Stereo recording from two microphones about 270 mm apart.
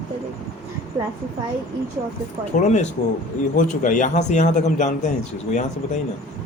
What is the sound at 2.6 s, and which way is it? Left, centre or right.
A man's voice, left.